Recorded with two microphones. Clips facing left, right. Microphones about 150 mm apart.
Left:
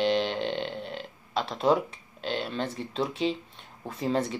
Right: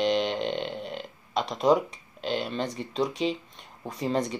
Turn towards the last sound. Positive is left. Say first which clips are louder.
# even
turn(degrees=0)  # may be behind; listen again after turning